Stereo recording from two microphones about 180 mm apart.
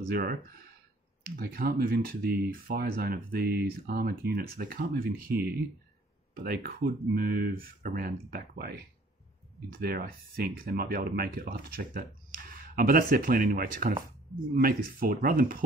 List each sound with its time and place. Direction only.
0.0 s speech: 55° right (ahead or behind)